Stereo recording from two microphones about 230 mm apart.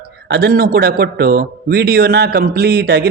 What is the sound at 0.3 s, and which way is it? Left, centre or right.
A man's voice, right.